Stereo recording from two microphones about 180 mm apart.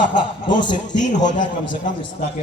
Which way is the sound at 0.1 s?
25° left (ahead or behind).